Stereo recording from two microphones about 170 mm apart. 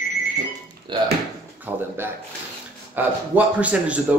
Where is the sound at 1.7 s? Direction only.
10° right (ahead or behind).